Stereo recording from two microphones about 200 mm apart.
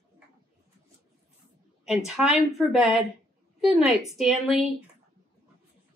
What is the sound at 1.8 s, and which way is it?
Speech, centre (ahead or behind).